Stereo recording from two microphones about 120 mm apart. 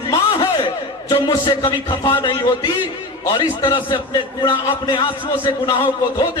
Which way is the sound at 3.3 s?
40° left (ahead or behind).